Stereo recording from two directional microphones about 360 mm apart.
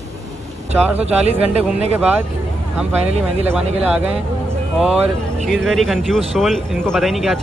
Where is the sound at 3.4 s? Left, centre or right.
Centre.